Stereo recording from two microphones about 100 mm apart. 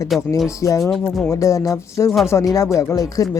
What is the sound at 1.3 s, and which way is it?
Speech, 30° left (ahead or behind).